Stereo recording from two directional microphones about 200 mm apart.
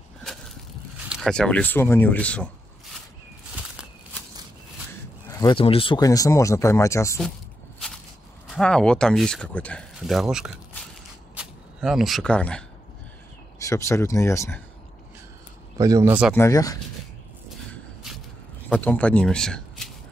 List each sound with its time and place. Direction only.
1.0 s speech: centre (ahead or behind)
5.3 s speech: 20° left (ahead or behind)
8.5 s speech: centre (ahead or behind)
13.7 s speech: 15° left (ahead or behind)
15.8 s speech: 15° right (ahead or behind)
16.3 s speech: 15° left (ahead or behind)
18.7 s speech: 5° left (ahead or behind)